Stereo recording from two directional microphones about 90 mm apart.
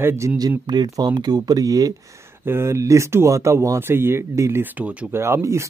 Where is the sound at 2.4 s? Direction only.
25° right (ahead or behind).